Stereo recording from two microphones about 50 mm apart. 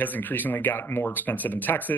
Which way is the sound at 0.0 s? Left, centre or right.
Left.